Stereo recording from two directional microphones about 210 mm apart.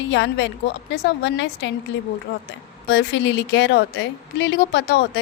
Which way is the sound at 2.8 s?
55° left (ahead or behind).